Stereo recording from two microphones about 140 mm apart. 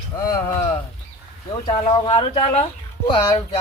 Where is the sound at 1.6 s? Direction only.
40° left (ahead or behind).